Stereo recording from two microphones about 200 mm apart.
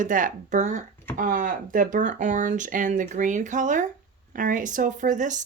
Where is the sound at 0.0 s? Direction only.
40° right (ahead or behind).